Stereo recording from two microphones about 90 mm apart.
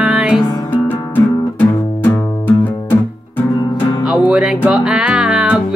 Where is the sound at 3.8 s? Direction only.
50° left (ahead or behind).